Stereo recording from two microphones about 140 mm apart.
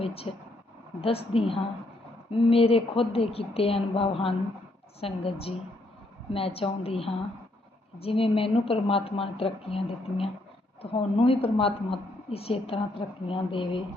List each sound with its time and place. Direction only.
0.0 s a woman's voice: 45° left (ahead or behind)